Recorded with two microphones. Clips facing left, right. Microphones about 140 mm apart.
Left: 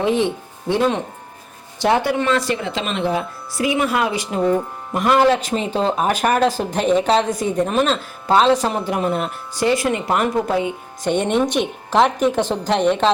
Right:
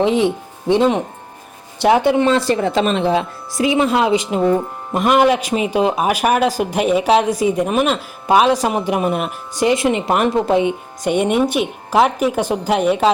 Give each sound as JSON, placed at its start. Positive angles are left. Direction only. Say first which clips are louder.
{"t": 0.0, "sound": "speech", "louder": "right 3 dB", "side_deg": -15}
{"t": 2.0, "sound": "speech", "louder": "right 5 dB", "side_deg": -25}
{"t": 2.6, "sound": "a woman's voice", "louder": "right 6 dB", "side_deg": -40}
{"t": 11.1, "sound": "speech", "louder": "right 2 dB", "side_deg": -10}